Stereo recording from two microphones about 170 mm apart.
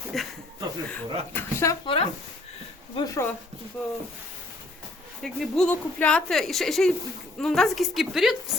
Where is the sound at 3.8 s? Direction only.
5° left (ahead or behind).